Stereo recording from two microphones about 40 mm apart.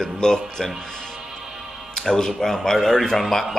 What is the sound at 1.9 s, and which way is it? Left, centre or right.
Speech, centre.